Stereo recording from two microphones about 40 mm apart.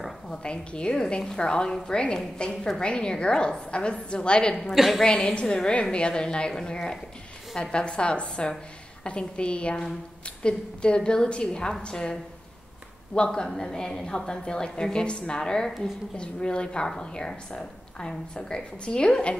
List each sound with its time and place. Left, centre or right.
0.3 s a woman's voice: left
4.7 s a woman's voice: centre
5.0 s a woman's voice: left